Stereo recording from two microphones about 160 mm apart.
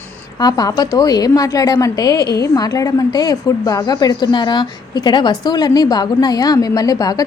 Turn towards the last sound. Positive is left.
turn(degrees=25)  # may be behind; listen again after turning